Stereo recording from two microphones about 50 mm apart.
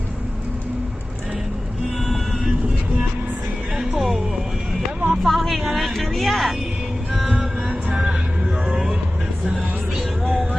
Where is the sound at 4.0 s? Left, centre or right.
Centre.